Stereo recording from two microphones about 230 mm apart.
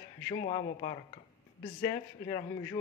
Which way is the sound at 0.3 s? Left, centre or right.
Left.